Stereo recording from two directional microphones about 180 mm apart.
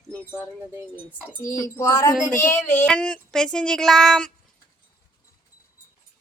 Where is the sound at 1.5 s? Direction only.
15° left (ahead or behind).